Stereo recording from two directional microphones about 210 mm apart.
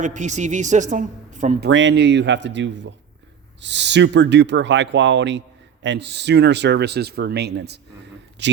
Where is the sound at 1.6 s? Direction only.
60° right (ahead or behind).